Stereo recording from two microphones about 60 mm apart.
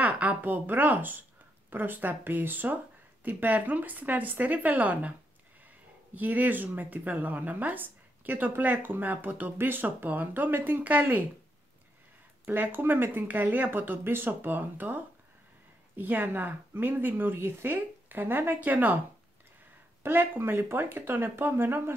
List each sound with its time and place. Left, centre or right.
0.0 s a woman's voice: right
6.1 s speech: right
12.4 s speech: right
20.0 s speech: right